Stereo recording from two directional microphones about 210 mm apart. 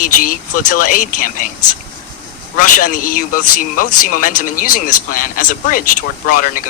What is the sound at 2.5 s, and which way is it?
Speech, 40° left (ahead or behind).